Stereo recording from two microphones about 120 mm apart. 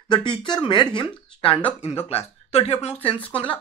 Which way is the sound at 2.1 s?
55° left (ahead or behind).